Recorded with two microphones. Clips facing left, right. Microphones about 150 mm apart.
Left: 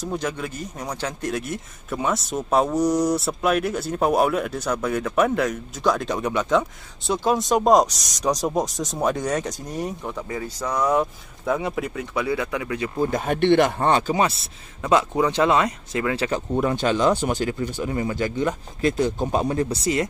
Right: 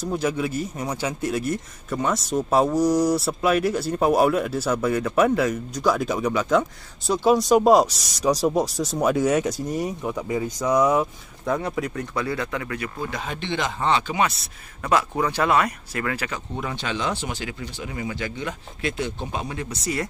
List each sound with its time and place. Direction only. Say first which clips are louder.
0.0 s speech: right 3 dB; 5° right (ahead or behind); by 12.9 s 20° left (ahead or behind)
13.0 s speech: left 9 dB; 50° left (ahead or behind)
14.8 s speech: left 3 dB; 15° left (ahead or behind)
16.3 s speech: left 8 dB; 45° left (ahead or behind); by 20.1 s 25° left (ahead or behind)